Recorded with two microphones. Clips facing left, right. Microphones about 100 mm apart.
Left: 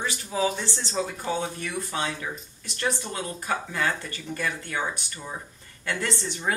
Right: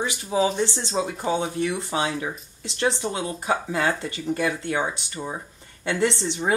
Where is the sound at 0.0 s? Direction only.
15° right (ahead or behind).